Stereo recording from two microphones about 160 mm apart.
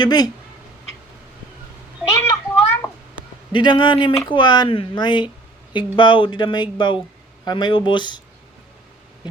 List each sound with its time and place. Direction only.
0.0 s speech: 25° left (ahead or behind)
2.0 s children playing: 15° left (ahead or behind)
3.5 s speech: 30° left (ahead or behind)